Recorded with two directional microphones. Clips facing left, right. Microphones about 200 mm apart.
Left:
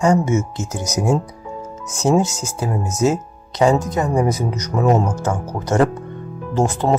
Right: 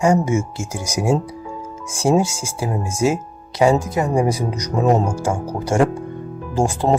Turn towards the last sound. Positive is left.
turn(degrees=-10)  # may be behind; listen again after turning